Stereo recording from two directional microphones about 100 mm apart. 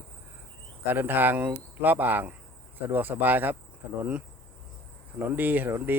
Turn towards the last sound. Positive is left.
turn(degrees=-20)  # may be behind; listen again after turning